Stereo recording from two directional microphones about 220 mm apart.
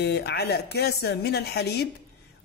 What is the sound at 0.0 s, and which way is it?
A man's voice, 50° left (ahead or behind).